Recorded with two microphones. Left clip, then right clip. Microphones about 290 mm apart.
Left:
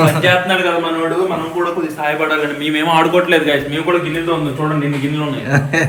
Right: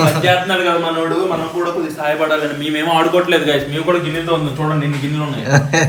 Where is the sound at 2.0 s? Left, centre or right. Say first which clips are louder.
Even; centre.